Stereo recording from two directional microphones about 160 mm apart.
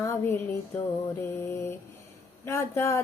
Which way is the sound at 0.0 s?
15° left (ahead or behind).